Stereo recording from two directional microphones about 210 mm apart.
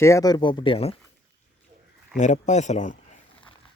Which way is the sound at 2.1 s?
35° left (ahead or behind).